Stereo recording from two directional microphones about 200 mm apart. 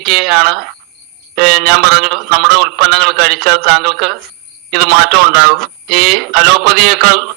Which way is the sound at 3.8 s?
Centre (ahead or behind).